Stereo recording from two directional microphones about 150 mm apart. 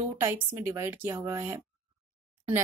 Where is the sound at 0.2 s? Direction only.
15° right (ahead or behind).